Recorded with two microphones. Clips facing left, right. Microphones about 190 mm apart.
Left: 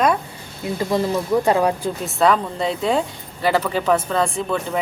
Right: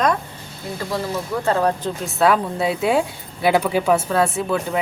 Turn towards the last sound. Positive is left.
turn(degrees=-5)  # may be behind; listen again after turning